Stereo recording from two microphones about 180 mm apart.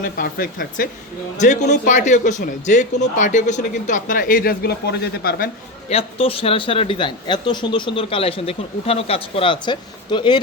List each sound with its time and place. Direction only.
0.2 s speech: 50° left (ahead or behind)
1.4 s speech: 40° left (ahead or behind); by 5.5 s 60° left (ahead or behind)
5.9 s speech: 30° left (ahead or behind)